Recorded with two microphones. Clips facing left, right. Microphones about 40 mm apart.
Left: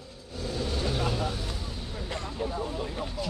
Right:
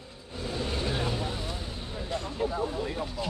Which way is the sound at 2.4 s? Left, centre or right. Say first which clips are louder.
Right 3 dB; centre.